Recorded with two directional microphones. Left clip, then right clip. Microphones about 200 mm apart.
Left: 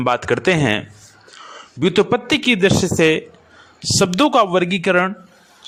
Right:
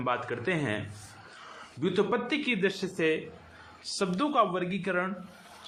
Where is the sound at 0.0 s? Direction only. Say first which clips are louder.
Left 14 dB; 55° left (ahead or behind).